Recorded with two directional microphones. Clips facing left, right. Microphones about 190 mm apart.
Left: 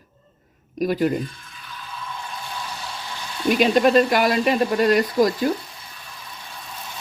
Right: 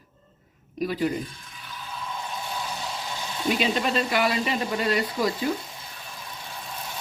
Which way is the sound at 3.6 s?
50° left (ahead or behind).